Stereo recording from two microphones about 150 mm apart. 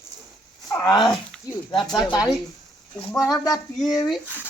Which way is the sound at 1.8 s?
5° left (ahead or behind).